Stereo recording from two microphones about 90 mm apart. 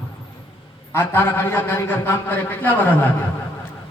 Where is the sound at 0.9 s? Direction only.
25° left (ahead or behind).